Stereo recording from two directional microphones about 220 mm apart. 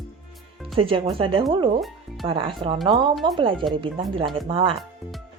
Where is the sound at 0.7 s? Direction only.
25° right (ahead or behind).